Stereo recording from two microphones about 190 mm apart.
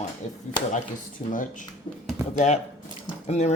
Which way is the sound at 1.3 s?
45° left (ahead or behind).